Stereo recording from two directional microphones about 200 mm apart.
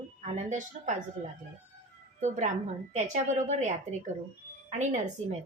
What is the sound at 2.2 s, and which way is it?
Speech, 35° right (ahead or behind).